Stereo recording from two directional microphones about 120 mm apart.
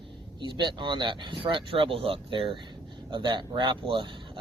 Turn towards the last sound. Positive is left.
turn(degrees=-45)  # may be behind; listen again after turning